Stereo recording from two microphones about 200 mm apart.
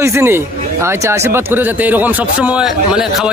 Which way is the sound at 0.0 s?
15° right (ahead or behind).